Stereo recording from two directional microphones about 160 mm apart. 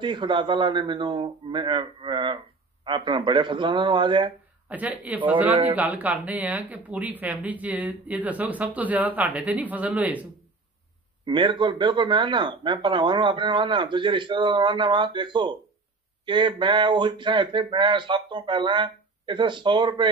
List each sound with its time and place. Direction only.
0.0 s speech: 30° right (ahead or behind)
4.6 s speech: 10° right (ahead or behind)
11.2 s speech: 30° right (ahead or behind)